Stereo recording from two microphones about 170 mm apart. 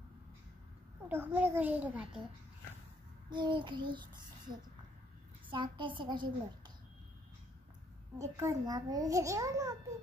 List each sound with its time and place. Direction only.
1.0 s a child's voice: 10° right (ahead or behind)
3.3 s a child's voice: 25° right (ahead or behind)
5.5 s a child's voice: 30° right (ahead or behind)
8.2 s a child's voice: 20° right (ahead or behind)